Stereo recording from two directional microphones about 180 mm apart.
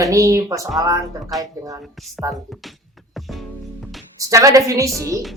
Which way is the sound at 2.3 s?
20° right (ahead or behind).